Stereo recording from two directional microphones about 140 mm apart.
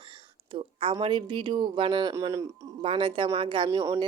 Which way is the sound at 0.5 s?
40° right (ahead or behind).